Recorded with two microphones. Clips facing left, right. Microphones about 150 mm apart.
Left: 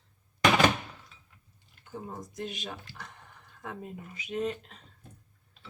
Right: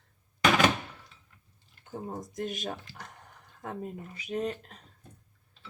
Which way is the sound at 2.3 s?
45° right (ahead or behind).